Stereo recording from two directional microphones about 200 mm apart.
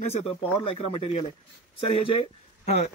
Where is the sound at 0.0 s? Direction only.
30° left (ahead or behind).